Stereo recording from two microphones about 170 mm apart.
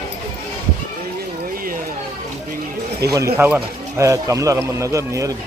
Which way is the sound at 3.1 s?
20° right (ahead or behind).